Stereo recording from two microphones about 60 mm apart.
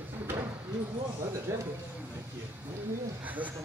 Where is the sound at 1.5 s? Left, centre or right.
Right.